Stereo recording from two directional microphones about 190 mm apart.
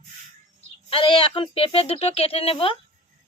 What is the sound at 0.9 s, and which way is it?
Speech, 30° left (ahead or behind).